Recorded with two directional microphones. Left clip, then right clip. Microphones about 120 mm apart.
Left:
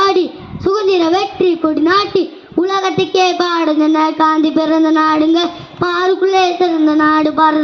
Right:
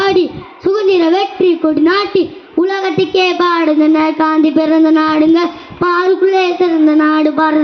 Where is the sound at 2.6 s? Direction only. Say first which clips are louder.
Even; 40° right (ahead or behind).